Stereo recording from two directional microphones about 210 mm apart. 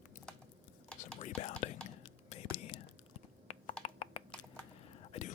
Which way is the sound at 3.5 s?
30° left (ahead or behind).